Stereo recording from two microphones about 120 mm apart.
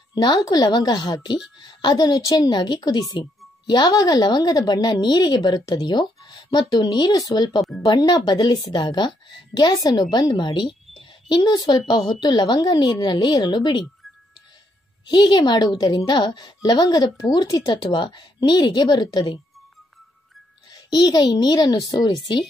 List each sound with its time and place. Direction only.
0.1 s a woman's voice: 35° left (ahead or behind)
11.0 s a sound: 35° left (ahead or behind)
12.0 s a woman's voice: 35° left (ahead or behind)
15.1 s a woman's voice: 40° left (ahead or behind)
20.7 s a woman's voice: 35° left (ahead or behind)